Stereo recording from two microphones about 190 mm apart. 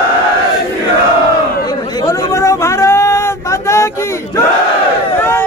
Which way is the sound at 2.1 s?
15° left (ahead or behind).